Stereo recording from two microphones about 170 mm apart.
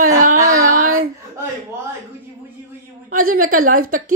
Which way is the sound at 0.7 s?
45° right (ahead or behind).